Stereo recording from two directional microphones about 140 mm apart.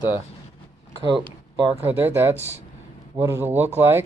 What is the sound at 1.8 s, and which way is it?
Speech, 15° right (ahead or behind).